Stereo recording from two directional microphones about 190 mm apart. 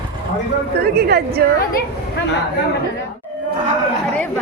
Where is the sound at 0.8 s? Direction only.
55° right (ahead or behind).